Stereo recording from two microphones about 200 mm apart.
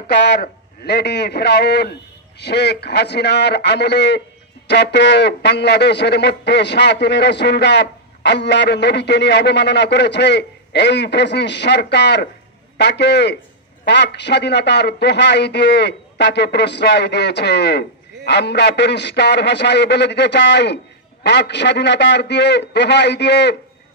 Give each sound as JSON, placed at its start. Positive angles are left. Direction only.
{"t": 0.3, "sound": "a man's voice", "side_deg": 55}